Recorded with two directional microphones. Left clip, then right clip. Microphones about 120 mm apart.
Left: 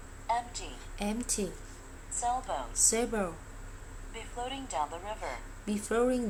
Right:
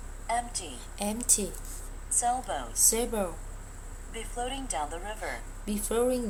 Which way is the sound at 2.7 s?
20° left (ahead or behind).